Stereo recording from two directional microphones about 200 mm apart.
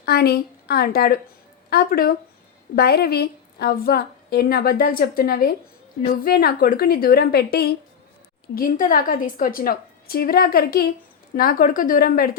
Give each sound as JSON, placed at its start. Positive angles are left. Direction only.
{"t": 0.0, "sound": "a woman's voice", "side_deg": 55}